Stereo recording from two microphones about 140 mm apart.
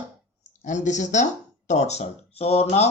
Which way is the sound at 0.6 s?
60° left (ahead or behind).